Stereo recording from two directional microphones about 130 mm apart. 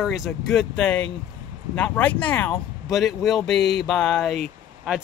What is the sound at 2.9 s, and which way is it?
Speech, centre (ahead or behind).